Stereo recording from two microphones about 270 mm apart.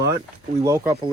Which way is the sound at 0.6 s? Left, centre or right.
Centre.